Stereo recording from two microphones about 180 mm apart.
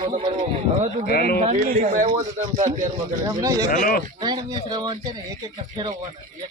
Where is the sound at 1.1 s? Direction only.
60° left (ahead or behind).